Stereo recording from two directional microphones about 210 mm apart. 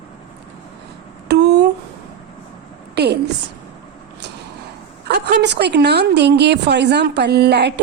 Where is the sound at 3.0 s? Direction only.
50° right (ahead or behind).